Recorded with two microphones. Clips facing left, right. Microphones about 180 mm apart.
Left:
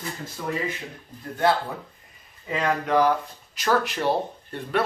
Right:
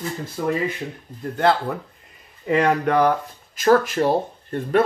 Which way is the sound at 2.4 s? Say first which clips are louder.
Right 6 dB; 65° right (ahead or behind).